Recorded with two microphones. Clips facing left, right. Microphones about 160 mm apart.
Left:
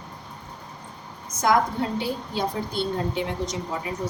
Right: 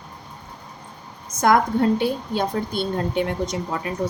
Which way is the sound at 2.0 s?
60° right (ahead or behind).